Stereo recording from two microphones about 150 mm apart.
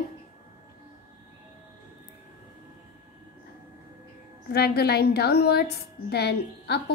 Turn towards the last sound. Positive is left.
turn(degrees=90)